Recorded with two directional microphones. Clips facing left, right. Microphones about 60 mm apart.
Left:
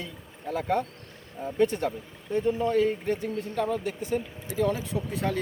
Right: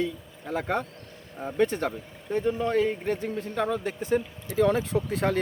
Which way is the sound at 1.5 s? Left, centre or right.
Right.